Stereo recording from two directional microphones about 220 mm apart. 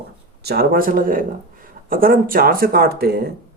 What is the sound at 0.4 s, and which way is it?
Speech, 45° right (ahead or behind).